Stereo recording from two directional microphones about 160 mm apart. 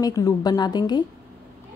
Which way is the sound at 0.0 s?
20° left (ahead or behind).